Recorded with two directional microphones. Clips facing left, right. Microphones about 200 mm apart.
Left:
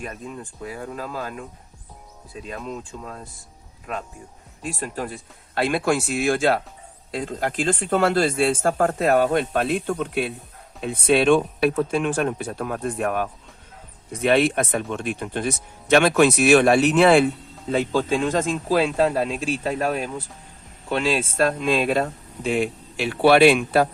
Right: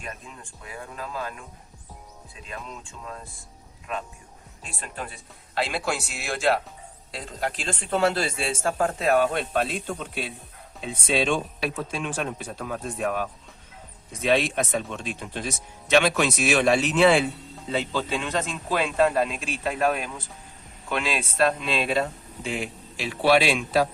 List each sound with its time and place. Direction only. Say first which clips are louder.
0.6 s speech: left 5 dB; 40° left (ahead or behind)
2.5 s speech: left 6 dB; 40° left (ahead or behind)
4.8 s speech: left 5 dB; 45° left (ahead or behind)
22.4 s speech: left 8 dB; 60° left (ahead or behind)